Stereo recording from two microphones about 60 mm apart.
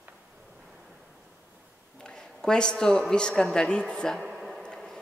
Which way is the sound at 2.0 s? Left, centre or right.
Centre.